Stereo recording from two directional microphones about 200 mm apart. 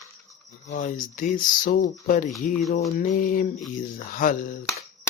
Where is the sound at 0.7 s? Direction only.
40° left (ahead or behind).